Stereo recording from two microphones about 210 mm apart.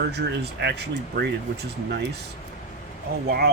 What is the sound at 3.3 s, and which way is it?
Speech, 50° right (ahead or behind).